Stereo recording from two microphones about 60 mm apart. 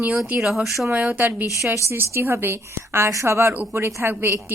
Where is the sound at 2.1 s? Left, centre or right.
Right.